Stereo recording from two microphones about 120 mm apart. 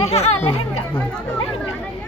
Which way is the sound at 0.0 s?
60° left (ahead or behind).